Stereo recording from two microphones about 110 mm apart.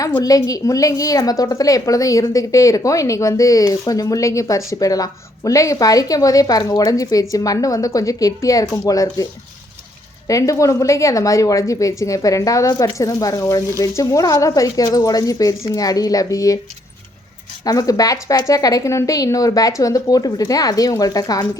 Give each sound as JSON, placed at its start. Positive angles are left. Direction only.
{"t": 0.2, "sound": "a woman's voice", "side_deg": 35}
{"t": 10.2, "sound": "a woman's voice", "side_deg": 30}
{"t": 17.7, "sound": "a woman's voice", "side_deg": 30}